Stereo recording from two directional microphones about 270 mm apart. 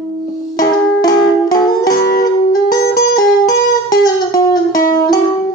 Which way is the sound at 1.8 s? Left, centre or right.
Left.